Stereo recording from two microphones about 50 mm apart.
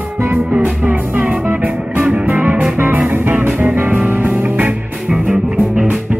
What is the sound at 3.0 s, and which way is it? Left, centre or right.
Music, right.